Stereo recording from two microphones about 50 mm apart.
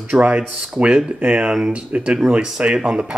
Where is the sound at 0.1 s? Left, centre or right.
Right.